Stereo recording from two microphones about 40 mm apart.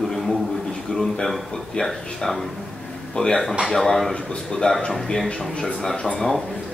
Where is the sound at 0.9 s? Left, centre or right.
Left.